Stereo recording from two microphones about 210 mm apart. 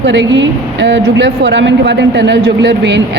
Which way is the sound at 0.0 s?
60° right (ahead or behind).